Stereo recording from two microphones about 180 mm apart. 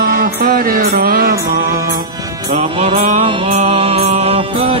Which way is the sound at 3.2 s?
30° right (ahead or behind).